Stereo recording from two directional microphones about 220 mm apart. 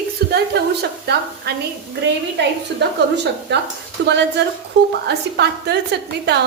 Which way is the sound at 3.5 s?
55° right (ahead or behind).